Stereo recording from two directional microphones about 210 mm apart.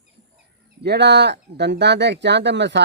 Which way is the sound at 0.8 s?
50° right (ahead or behind).